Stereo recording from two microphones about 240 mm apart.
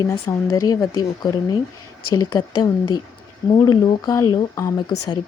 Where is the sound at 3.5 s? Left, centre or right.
Centre.